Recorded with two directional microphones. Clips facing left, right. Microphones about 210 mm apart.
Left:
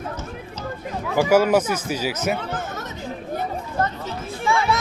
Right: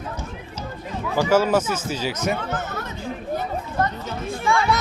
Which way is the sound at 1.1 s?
10° left (ahead or behind).